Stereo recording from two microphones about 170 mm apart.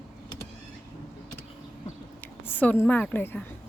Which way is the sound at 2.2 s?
10° left (ahead or behind).